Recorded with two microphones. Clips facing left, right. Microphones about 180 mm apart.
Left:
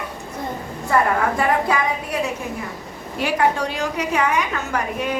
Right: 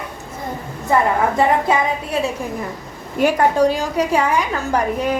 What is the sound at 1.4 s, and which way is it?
Speech, 25° right (ahead or behind).